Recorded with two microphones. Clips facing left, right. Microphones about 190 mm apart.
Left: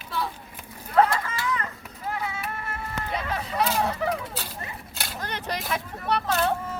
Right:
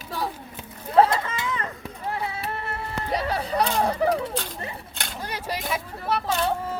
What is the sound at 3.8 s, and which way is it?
Speech, 35° right (ahead or behind).